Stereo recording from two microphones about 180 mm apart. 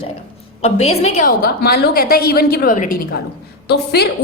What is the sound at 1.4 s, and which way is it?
A woman's voice, 60° left (ahead or behind).